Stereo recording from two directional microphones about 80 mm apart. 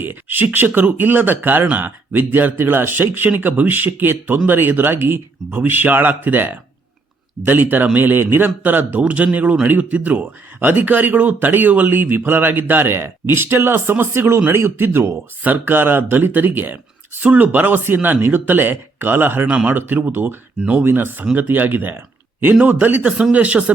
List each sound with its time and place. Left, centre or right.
0.0 s speech: right
19.5 s speech: centre
19.7 s speech: right